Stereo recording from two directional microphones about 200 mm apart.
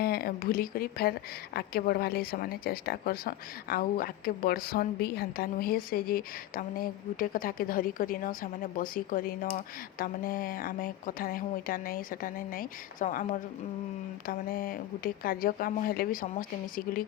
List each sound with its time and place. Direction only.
0.0 s speech: 50° left (ahead or behind)